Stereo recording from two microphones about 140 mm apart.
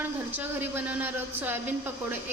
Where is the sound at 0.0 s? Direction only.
15° right (ahead or behind).